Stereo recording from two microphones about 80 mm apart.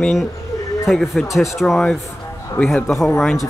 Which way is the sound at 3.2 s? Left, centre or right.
Centre.